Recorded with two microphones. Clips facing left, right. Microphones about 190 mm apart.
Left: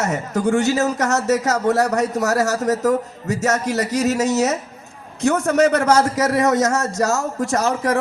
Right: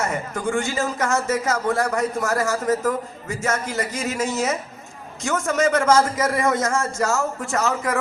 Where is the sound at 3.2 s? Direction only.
70° left (ahead or behind).